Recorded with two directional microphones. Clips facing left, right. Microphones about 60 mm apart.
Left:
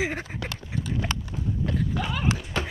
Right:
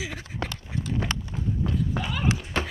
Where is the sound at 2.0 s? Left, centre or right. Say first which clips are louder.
Left 1 dB; right.